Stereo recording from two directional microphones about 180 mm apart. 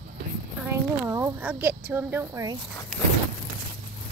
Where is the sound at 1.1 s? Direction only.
15° right (ahead or behind).